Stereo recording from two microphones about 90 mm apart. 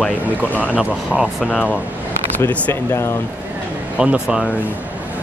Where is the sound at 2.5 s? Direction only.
25° left (ahead or behind).